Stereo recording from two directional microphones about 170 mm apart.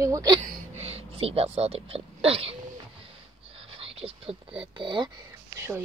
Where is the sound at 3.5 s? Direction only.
35° right (ahead or behind).